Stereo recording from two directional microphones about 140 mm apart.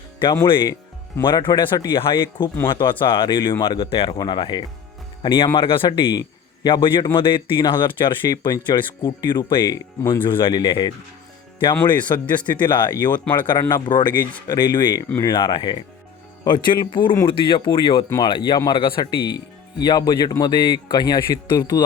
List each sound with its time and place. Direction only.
0.4 s speech: 35° left (ahead or behind)
6.1 s speech: 30° left (ahead or behind)
10.2 s speech: 35° left (ahead or behind)